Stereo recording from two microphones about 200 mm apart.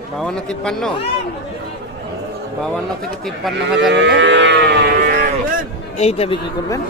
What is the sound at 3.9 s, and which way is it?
Livestock, 60° right (ahead or behind).